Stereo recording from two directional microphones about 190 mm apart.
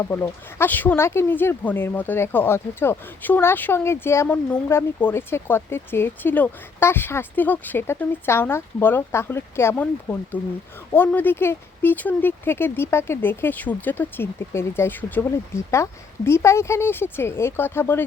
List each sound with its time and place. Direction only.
0.1 s speech: 10° left (ahead or behind)